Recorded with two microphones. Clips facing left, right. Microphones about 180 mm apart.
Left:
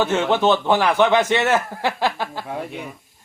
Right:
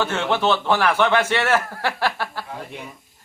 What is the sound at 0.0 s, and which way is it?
Speech, 20° left (ahead or behind).